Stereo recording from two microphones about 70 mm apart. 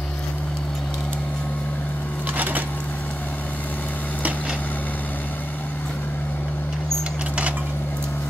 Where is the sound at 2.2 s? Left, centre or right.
Right.